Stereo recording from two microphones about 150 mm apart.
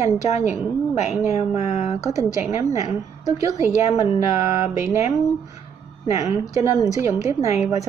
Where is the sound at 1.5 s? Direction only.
45° left (ahead or behind).